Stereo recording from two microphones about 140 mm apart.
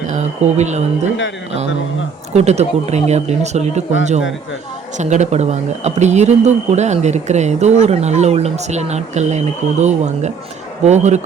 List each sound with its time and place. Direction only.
0.1 s speech: 55° right (ahead or behind)
2.3 s speech: 50° right (ahead or behind)